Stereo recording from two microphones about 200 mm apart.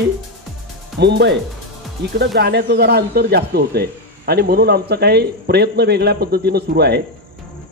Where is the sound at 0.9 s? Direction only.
55° right (ahead or behind).